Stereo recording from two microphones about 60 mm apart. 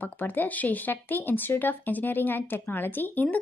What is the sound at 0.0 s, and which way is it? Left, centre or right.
Speech, left.